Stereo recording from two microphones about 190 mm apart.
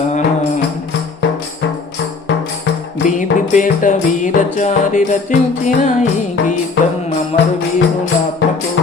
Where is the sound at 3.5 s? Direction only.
45° left (ahead or behind).